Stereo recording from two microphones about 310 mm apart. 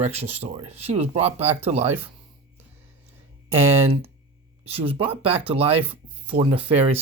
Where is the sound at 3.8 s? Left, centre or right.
Centre.